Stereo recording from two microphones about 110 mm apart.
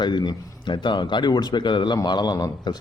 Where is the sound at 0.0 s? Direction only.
40° left (ahead or behind).